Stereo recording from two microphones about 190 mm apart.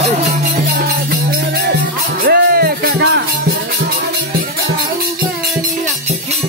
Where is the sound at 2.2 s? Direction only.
55° right (ahead or behind).